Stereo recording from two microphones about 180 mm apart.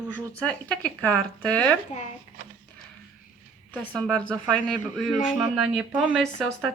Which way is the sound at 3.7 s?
5° left (ahead or behind).